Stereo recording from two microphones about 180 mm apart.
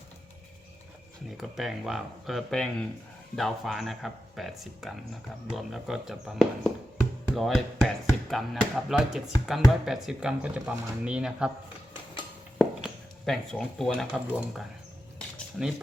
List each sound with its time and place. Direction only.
1.4 s speech: centre (ahead or behind)
12.5 s speech: centre (ahead or behind)